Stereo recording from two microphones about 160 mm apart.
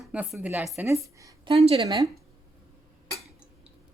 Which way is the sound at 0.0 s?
5° right (ahead or behind).